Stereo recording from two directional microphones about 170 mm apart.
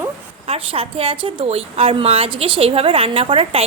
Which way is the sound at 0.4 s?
35° right (ahead or behind).